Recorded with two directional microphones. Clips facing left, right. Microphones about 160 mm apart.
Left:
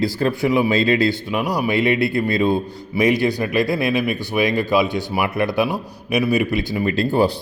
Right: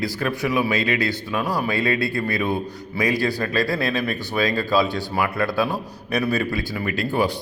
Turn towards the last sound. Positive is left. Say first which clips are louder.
# left 5 dB
turn(degrees=30)  # may be behind; listen again after turning